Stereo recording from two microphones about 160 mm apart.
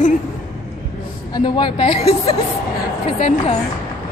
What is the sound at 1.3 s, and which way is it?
A woman's voice, 30° left (ahead or behind).